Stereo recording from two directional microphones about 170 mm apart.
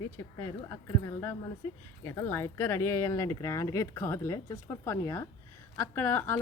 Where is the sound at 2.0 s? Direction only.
15° left (ahead or behind).